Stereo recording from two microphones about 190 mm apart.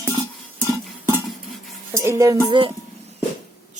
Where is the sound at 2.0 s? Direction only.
15° right (ahead or behind).